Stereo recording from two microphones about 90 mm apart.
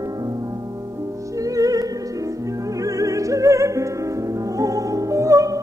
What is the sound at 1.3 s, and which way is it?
Music, 40° right (ahead or behind).